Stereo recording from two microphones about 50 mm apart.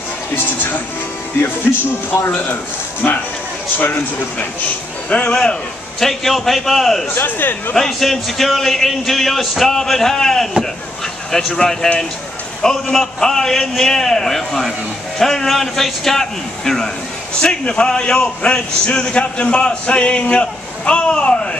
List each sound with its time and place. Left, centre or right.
0.4 s speech: left
3.7 s speech: left
5.1 s a man's voice: centre
6.0 s a man's voice: centre
7.2 s speech: left
7.7 s a man's voice: centre
11.5 s a man's voice: centre